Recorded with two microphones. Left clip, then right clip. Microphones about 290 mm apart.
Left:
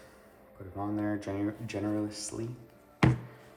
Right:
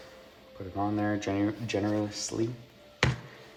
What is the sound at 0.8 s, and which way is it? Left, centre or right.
Speech, right.